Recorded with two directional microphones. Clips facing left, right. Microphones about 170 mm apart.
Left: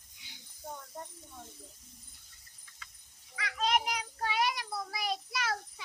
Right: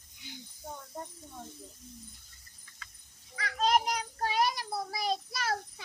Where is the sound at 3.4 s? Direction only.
40° right (ahead or behind).